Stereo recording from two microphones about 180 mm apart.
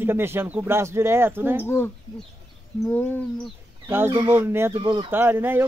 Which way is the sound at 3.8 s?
10° right (ahead or behind).